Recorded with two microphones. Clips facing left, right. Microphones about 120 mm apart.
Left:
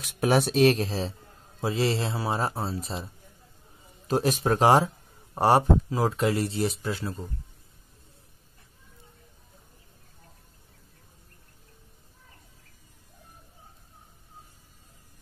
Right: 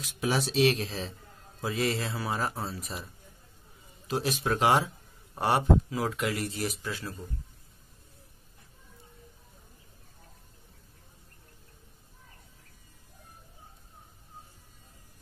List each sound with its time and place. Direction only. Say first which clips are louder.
0.0 s a man's voice: left 6 dB; 55° left (ahead or behind); by 3.1 s 30° left (ahead or behind)
4.1 s speech: left 5 dB; 45° left (ahead or behind); by 7.2 s 25° left (ahead or behind)